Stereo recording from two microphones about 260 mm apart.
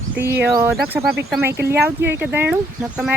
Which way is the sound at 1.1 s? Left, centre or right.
Centre.